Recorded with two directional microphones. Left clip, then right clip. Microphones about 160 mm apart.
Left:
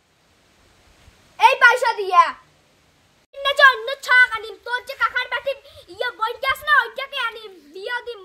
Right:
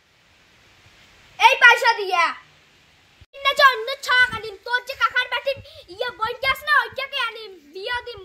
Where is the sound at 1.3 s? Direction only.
10° left (ahead or behind).